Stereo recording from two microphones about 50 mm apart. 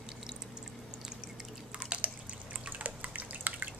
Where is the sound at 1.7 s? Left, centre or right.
Right.